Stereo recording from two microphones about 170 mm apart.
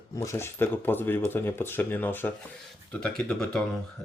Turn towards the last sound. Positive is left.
turn(degrees=5)  # may be behind; listen again after turning